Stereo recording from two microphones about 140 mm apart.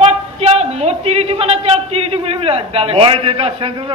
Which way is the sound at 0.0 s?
50° right (ahead or behind).